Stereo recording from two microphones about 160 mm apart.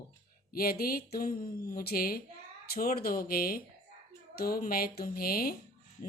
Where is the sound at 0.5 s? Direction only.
65° left (ahead or behind).